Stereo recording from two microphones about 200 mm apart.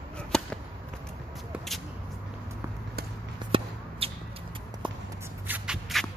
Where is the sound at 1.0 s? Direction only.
Centre (ahead or behind).